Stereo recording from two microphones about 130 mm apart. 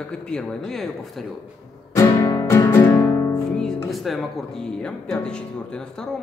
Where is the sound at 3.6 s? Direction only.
Centre (ahead or behind).